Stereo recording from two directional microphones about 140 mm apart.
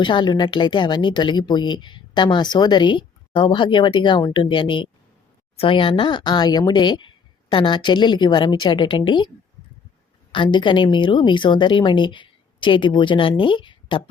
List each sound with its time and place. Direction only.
0.0 s speech: 35° left (ahead or behind)
10.3 s speech: 35° left (ahead or behind)